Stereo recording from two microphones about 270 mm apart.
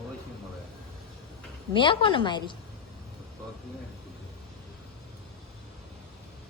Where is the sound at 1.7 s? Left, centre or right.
Centre.